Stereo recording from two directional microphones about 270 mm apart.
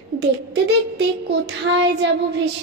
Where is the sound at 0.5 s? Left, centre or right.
Right.